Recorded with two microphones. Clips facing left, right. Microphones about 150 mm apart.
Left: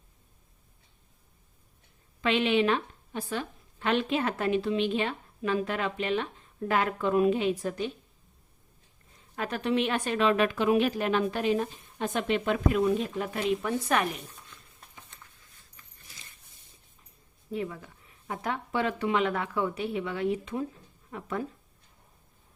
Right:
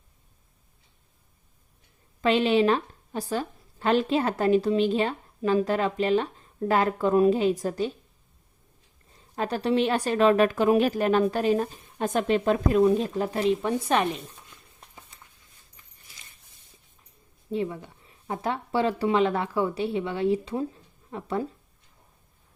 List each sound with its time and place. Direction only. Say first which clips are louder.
2.2 s a woman's voice: right 4 dB; 35° right (ahead or behind)
9.3 s a woman's voice: right 4 dB; 35° right (ahead or behind)
17.5 s a woman's voice: right 5 dB; 25° right (ahead or behind)